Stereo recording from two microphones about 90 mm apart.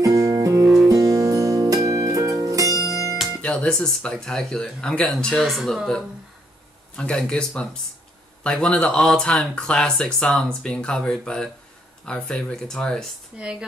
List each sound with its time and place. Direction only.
0.0 s music: 40° right (ahead or behind)
3.4 s speech: 5° left (ahead or behind)
7.0 s speech: 10° left (ahead or behind)
13.4 s speech: 10° right (ahead or behind)